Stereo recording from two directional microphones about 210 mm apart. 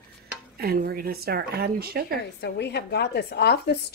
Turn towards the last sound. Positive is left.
turn(degrees=50)  # may be behind; listen again after turning